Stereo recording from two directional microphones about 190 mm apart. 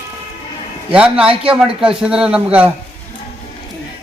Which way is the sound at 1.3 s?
30° right (ahead or behind).